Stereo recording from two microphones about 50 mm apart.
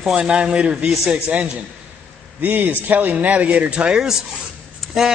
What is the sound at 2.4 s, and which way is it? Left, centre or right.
A man's voice, right.